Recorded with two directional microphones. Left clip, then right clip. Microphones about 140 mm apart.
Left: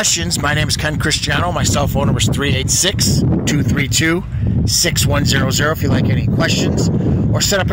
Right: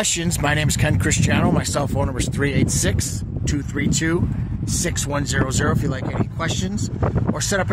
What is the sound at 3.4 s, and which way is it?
Speech, 20° left (ahead or behind).